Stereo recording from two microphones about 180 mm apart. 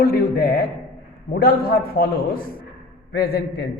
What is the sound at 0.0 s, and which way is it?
Mantra, 60° left (ahead or behind).